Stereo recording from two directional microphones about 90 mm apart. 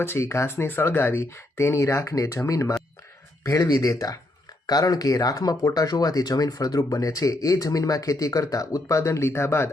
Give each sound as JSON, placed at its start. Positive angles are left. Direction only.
{"t": 0.0, "sound": "speech", "side_deg": 25}